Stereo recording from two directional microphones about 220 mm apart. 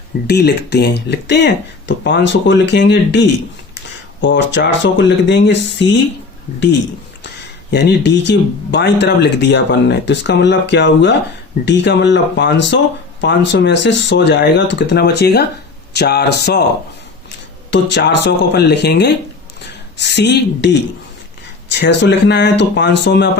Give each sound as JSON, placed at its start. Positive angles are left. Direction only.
{"t": 0.3, "sound": "speech", "side_deg": 50}
{"t": 7.7, "sound": "speech", "side_deg": 50}
{"t": 17.7, "sound": "speech", "side_deg": 55}